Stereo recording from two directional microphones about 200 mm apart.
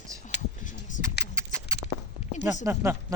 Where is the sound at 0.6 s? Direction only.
40° left (ahead or behind).